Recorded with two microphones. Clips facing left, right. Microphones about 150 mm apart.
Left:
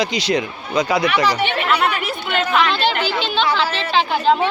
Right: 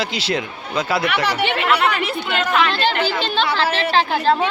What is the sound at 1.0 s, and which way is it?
Speech, 80° right.